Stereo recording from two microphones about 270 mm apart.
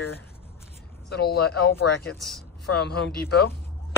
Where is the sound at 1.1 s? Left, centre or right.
Left.